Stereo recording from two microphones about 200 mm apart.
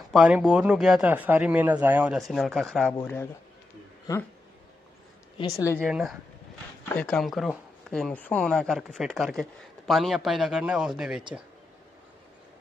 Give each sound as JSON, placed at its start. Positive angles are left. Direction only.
{"t": 0.1, "sound": "speech", "side_deg": -5}
{"t": 5.4, "sound": "speech", "side_deg": 15}
{"t": 5.8, "sound": "speech", "side_deg": 0}